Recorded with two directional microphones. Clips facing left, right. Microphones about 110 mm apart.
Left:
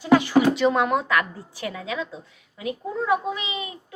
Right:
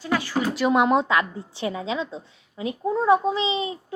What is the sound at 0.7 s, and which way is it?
A woman's voice, 20° right (ahead or behind).